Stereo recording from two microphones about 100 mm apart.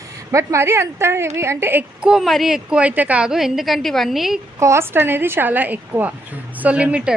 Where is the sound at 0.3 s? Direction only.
30° right (ahead or behind).